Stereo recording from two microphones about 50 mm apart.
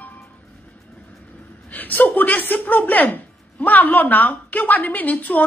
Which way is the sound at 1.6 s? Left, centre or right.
Left.